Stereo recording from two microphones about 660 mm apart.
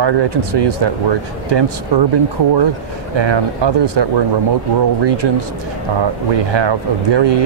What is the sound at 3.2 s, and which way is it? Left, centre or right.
Speech, right.